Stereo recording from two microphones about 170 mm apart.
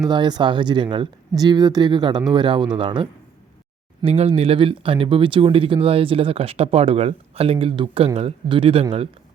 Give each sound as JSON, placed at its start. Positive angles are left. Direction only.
{"t": 0.0, "sound": "speech", "side_deg": -25}